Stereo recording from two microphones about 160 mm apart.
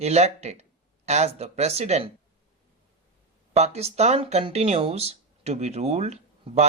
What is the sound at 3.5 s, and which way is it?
Speech, 40° right (ahead or behind).